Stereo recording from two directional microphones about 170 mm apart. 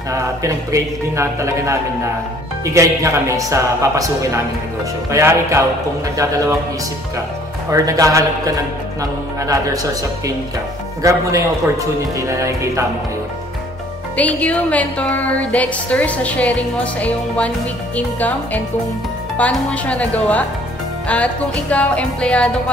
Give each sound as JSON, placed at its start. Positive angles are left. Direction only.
{"t": 0.1, "sound": "speech", "side_deg": -20}
{"t": 7.7, "sound": "a man's voice", "side_deg": -20}
{"t": 11.0, "sound": "a man's voice", "side_deg": -20}
{"t": 14.1, "sound": "music", "side_deg": 10}